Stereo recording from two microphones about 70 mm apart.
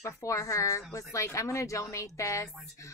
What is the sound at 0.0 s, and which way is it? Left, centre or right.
A woman's voice, left.